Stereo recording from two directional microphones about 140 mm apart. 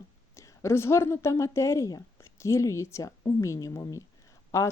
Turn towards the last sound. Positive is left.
turn(degrees=20)  # may be behind; listen again after turning